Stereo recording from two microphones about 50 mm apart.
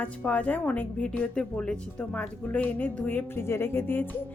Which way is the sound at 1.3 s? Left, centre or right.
Centre.